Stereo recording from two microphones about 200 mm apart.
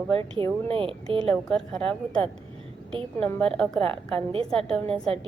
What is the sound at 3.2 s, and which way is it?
Speech, 5° left (ahead or behind).